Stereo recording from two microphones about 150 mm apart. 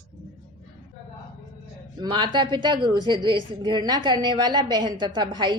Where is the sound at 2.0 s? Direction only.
30° right (ahead or behind).